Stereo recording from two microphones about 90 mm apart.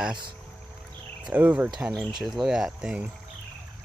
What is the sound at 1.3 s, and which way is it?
Speech, 15° right (ahead or behind).